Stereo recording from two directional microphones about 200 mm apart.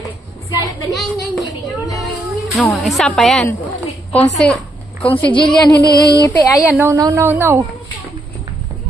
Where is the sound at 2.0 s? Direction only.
Centre (ahead or behind).